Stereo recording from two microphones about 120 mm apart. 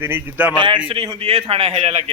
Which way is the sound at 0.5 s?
40° right (ahead or behind).